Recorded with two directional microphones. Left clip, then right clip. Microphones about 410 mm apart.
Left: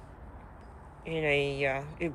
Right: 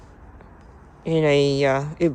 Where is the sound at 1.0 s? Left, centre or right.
Right.